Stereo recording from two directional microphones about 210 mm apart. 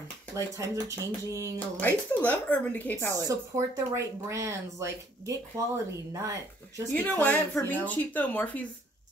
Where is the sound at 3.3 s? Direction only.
15° right (ahead or behind).